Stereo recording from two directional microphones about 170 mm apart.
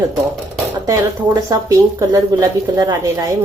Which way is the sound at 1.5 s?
20° right (ahead or behind).